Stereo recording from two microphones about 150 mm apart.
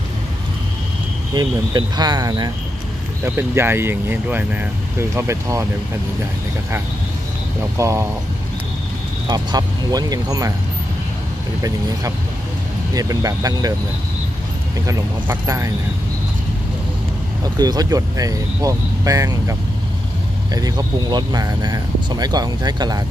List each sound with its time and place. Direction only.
1.3 s speech: 30° right (ahead or behind)
3.3 s speech: 15° right (ahead or behind)
7.7 s speech: 20° right (ahead or behind)
9.3 s speech: 25° right (ahead or behind)
12.9 s speech: 25° right (ahead or behind)
14.9 s speech: 20° right (ahead or behind)
17.6 s speech: 25° right (ahead or behind)
20.5 s speech: 25° right (ahead or behind)